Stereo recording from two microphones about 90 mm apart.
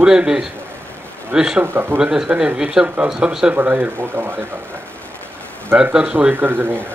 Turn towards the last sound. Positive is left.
turn(degrees=-25)  # may be behind; listen again after turning